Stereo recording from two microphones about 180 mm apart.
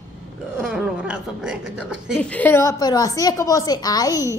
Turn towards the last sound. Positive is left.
turn(degrees=20)  # may be behind; listen again after turning